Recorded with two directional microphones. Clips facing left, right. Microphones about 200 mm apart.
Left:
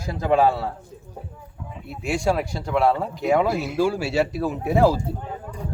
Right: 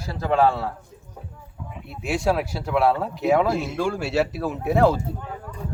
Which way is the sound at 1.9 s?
Centre (ahead or behind).